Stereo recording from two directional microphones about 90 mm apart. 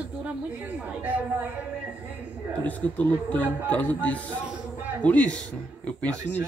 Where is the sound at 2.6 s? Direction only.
15° left (ahead or behind).